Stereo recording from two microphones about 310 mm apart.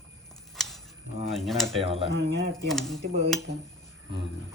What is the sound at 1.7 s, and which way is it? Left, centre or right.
Speech, centre.